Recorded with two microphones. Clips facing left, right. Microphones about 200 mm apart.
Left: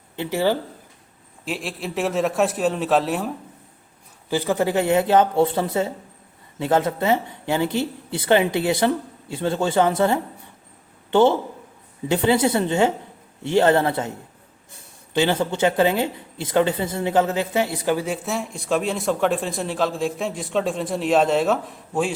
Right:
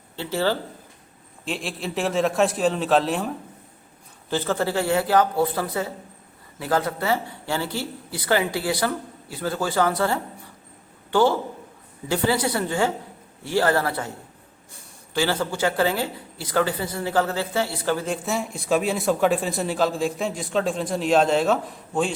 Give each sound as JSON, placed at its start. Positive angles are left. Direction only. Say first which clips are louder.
{"t": 0.2, "sound": "speech", "louder": "left 3 dB", "side_deg": 15}
{"t": 1.5, "sound": "speech", "louder": "left 1 dB", "side_deg": 0}
{"t": 4.3, "sound": "a woman's voice", "louder": "left 3 dB", "side_deg": 15}